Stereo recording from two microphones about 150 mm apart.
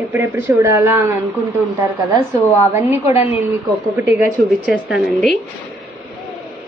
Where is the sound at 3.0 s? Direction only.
45° left (ahead or behind).